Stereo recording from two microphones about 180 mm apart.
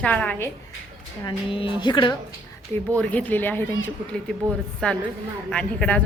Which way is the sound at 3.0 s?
10° left (ahead or behind).